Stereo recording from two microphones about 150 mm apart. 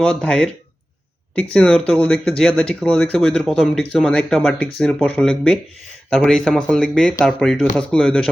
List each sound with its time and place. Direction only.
0.0 s speech: 5° left (ahead or behind)
1.5 s speech: 5° left (ahead or behind)